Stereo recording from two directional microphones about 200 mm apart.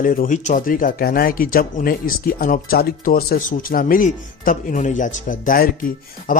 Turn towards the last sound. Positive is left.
turn(degrees=45)  # may be behind; listen again after turning